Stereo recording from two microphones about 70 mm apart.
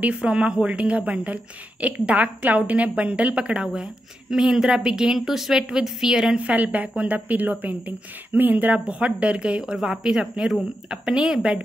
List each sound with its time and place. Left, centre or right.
0.1 s a woman's voice: centre